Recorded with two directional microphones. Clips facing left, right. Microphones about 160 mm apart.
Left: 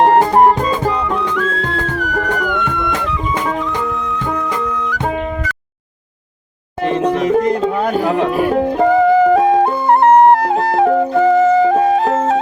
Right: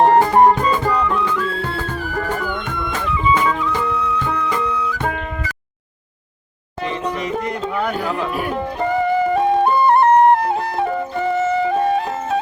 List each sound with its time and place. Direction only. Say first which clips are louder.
1.3 s music: left 3 dB; 75° left (ahead or behind)
1.6 s music: left 4 dB; 20° left (ahead or behind)
2.8 s music: left 1 dB; 75° left (ahead or behind)
3.4 s music: left 1 dB; 50° left (ahead or behind)
7.2 s a sound: left 9 dB; 40° left (ahead or behind)
8.0 s music: left 7 dB; 80° left
8.3 s music: left 8 dB; 35° left (ahead or behind)
8.5 s music: left 8 dB; 90° left